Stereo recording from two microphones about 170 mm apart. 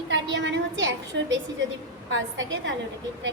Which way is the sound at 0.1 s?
90° right.